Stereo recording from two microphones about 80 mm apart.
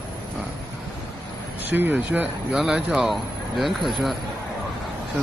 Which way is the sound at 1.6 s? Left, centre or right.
Right.